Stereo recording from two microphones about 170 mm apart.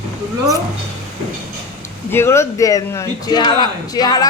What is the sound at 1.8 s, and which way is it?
Speech, 15° left (ahead or behind).